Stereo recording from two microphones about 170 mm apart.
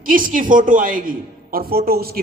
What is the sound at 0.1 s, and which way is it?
A woman's voice, 55° right (ahead or behind).